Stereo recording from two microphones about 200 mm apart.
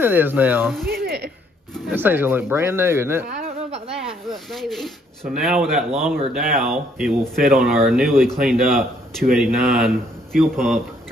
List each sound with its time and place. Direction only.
0.0 s speech: 10° right (ahead or behind)
0.8 s a sound: 55° right (ahead or behind)
1.7 s speech: 10° right (ahead or behind)
3.4 s a sound: 30° right (ahead or behind)
3.9 s speech: centre (ahead or behind)
6.3 s speech: 45° right (ahead or behind)
6.7 s speech: centre (ahead or behind)